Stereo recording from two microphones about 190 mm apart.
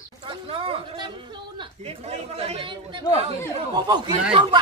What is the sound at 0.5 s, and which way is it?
A man's voice, 30° right (ahead or behind).